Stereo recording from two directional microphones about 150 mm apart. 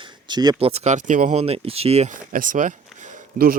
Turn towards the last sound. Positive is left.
turn(degrees=-70)  # may be behind; listen again after turning